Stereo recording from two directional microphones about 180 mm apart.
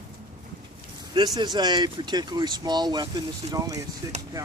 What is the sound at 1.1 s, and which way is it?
Speech, 25° right (ahead or behind).